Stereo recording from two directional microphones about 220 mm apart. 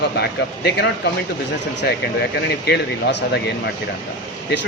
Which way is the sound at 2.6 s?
50° left (ahead or behind).